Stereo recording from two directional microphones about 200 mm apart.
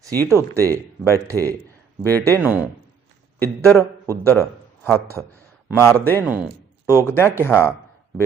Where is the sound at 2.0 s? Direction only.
10° left (ahead or behind).